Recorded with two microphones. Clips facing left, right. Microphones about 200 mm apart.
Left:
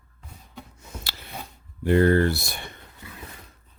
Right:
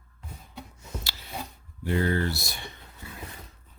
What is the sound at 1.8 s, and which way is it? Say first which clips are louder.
Speech: left 8 dB; 55° left (ahead or behind).